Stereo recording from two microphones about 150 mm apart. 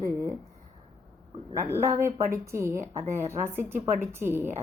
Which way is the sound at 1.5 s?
20° right (ahead or behind).